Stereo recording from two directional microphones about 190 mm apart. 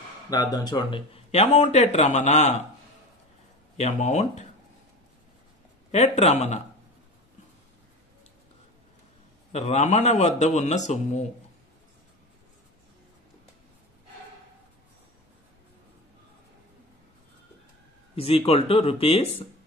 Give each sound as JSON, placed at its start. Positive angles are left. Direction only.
{"t": 0.3, "sound": "speech", "side_deg": 20}
{"t": 3.7, "sound": "speech", "side_deg": 35}
{"t": 5.9, "sound": "speech", "side_deg": 35}
{"t": 9.5, "sound": "speech", "side_deg": 35}
{"t": 18.1, "sound": "speech", "side_deg": 30}